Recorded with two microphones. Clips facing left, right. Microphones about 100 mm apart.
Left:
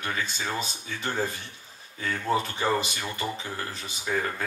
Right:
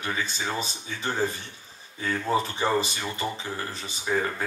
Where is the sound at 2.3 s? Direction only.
35° right (ahead or behind).